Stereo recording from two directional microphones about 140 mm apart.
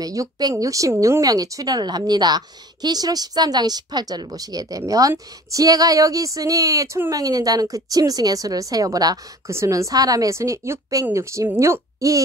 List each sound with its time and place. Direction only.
0.0 s speech: 25° right (ahead or behind)